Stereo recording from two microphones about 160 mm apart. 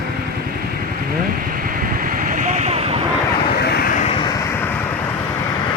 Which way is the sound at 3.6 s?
80° left.